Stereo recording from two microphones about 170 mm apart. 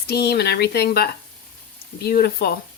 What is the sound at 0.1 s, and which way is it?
Speech, 70° left (ahead or behind).